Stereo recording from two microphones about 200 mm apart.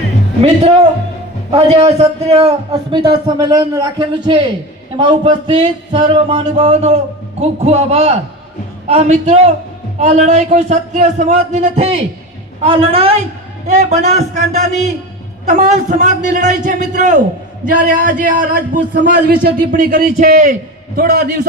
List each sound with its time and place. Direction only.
0.4 s a man's voice: 30° right (ahead or behind); by 21.3 s 50° right (ahead or behind)